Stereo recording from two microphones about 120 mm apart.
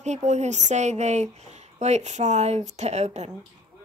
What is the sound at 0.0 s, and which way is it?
A woman's voice, 75° right (ahead or behind).